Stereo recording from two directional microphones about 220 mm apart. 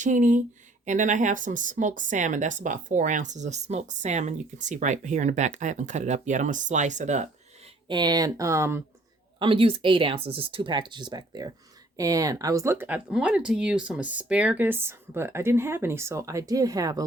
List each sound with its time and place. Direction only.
0.0 s speech: 35° right (ahead or behind)
7.9 s speech: 20° right (ahead or behind)
9.4 s speech: 25° right (ahead or behind)